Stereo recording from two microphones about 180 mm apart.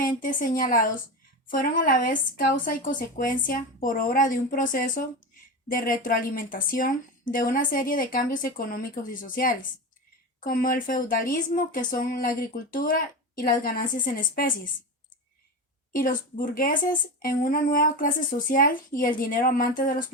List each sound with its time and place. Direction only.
0.0 s speech: 50° left (ahead or behind)
15.9 s speech: 50° left (ahead or behind)